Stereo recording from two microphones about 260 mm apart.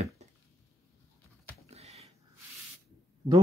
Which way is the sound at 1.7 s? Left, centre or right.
Right.